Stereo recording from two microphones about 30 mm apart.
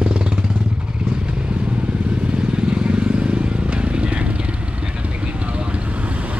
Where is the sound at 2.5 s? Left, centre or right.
Right.